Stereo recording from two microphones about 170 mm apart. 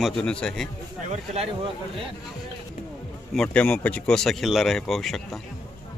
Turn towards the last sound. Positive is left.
turn(degrees=0)  # may be behind; listen again after turning